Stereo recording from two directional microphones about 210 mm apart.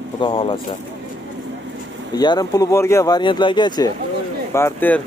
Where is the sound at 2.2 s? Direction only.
20° left (ahead or behind).